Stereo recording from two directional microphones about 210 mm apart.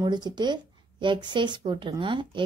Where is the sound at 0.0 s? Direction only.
20° right (ahead or behind).